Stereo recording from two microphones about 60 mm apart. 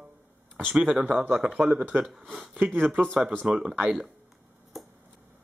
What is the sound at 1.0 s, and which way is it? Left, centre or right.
Speech, right.